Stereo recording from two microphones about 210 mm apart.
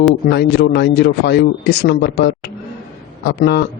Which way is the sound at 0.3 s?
55° left (ahead or behind).